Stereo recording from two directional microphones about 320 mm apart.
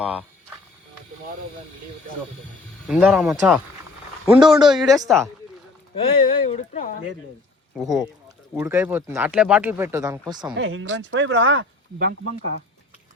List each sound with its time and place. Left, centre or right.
0.0 s speech: centre
2.8 s speech: centre
6.0 s speech: centre
7.8 s speech: centre
10.5 s speech: right